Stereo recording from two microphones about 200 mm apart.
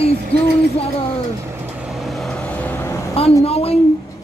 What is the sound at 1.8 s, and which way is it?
Vehicle, centre (ahead or behind).